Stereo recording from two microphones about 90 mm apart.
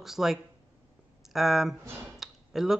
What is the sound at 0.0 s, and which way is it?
Speech, 5° right (ahead or behind).